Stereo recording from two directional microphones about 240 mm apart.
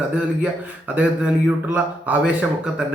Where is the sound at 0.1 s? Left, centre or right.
Centre.